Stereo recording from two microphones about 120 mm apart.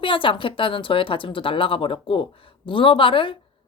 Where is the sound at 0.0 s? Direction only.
45° left (ahead or behind).